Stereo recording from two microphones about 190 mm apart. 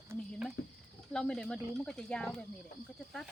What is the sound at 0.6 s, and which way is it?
Speech, 55° left (ahead or behind).